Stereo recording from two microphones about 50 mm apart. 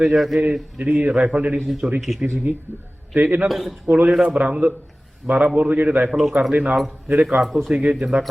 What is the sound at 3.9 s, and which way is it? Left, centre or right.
A man's voice, right.